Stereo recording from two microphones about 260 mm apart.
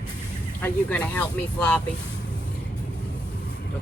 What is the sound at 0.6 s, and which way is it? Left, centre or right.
Speech, centre.